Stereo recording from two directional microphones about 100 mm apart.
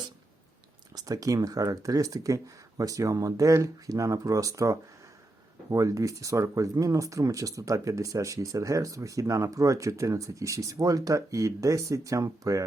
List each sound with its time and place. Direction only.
0.9 s speech: 35° right (ahead or behind)